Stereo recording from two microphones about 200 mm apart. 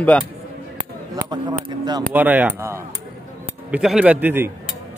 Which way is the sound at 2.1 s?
10° right (ahead or behind).